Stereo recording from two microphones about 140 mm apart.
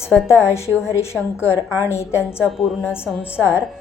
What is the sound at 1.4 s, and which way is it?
Speech, 20° left (ahead or behind).